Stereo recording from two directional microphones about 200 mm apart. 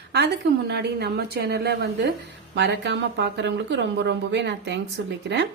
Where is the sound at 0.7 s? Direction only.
55° right (ahead or behind).